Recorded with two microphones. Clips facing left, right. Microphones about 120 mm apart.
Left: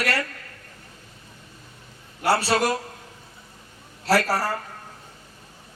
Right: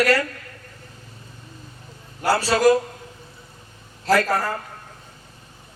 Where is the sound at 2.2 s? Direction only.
30° left (ahead or behind).